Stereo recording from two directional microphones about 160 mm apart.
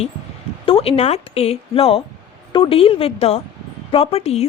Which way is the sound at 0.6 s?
35° left (ahead or behind).